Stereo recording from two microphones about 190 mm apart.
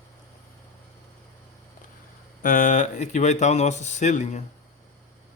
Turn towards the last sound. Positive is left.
turn(degrees=40)  # may be behind; listen again after turning